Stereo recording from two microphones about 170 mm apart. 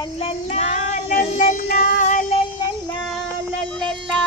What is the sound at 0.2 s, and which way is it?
Child singing, 40° left (ahead or behind).